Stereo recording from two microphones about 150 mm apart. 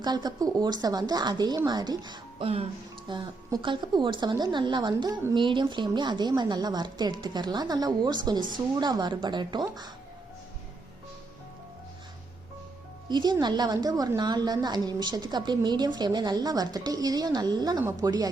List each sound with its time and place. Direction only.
0.0 s a woman's voice: 25° right (ahead or behind)
13.1 s a woman's voice: 30° right (ahead or behind)